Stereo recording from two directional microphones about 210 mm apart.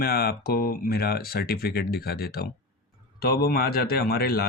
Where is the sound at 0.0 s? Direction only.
45° left (ahead or behind).